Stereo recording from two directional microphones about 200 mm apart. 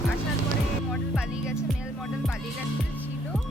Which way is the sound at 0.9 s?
5° right (ahead or behind).